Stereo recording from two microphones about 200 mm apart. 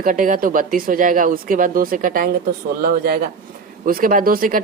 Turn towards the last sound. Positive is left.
turn(degrees=-45)  # may be behind; listen again after turning